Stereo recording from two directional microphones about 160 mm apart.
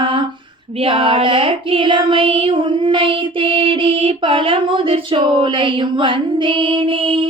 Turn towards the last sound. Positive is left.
turn(degrees=-35)  # may be behind; listen again after turning